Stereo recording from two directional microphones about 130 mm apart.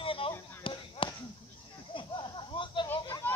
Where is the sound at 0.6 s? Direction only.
40° left (ahead or behind).